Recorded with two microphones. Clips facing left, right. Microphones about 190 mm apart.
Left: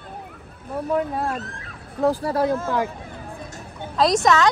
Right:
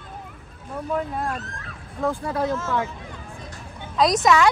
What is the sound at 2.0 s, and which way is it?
Speech, 35° left (ahead or behind).